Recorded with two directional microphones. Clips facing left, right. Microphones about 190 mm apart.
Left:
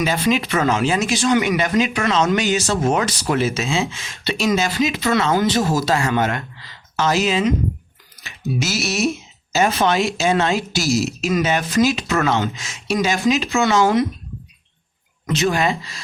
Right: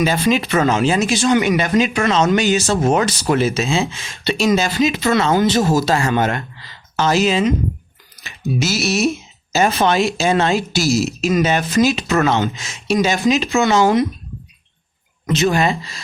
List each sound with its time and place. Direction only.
0.0 s speech: 35° right (ahead or behind)
15.4 s speech: 30° right (ahead or behind)